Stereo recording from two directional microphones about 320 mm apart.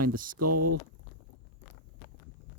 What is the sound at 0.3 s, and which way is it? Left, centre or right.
Speech, right.